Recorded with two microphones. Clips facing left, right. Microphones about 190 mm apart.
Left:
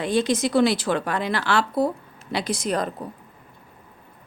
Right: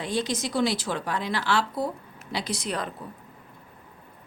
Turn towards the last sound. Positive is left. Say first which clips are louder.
# left 6 dB
turn(degrees=45)  # may be behind; listen again after turning